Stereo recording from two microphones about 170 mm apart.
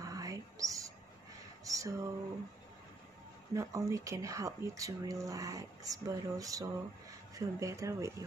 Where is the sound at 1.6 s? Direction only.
20° right (ahead or behind).